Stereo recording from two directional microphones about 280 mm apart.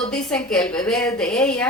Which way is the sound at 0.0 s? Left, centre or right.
Centre.